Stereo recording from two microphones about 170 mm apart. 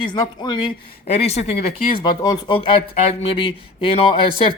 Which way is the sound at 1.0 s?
40° left (ahead or behind).